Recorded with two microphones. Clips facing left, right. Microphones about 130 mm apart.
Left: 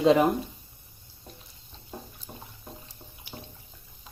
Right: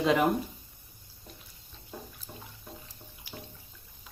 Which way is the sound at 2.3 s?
30° left (ahead or behind).